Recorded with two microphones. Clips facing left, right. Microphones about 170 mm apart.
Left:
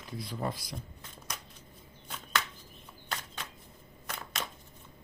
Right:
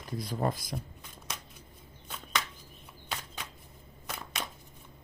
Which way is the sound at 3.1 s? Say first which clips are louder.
Even; 5° right (ahead or behind).